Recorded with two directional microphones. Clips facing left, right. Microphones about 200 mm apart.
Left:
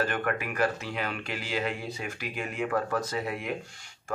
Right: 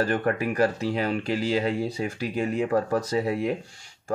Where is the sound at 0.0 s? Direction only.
30° right (ahead or behind).